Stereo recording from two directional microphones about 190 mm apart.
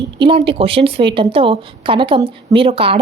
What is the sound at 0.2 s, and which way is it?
A woman's voice, 30° right (ahead or behind).